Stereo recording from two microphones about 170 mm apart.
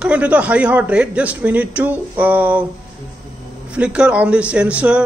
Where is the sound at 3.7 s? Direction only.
5° right (ahead or behind).